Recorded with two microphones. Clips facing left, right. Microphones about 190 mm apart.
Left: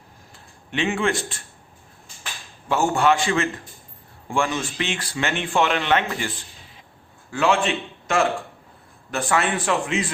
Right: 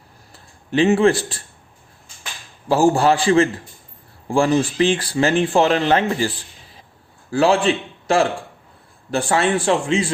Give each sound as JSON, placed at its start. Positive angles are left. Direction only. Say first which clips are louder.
{"t": 0.7, "sound": "speech", "louder": "right 8 dB", "side_deg": -35}
{"t": 2.6, "sound": "a man's voice", "louder": "right 5 dB", "side_deg": -35}